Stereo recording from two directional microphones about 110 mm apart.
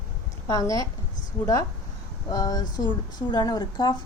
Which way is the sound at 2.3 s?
35° left (ahead or behind).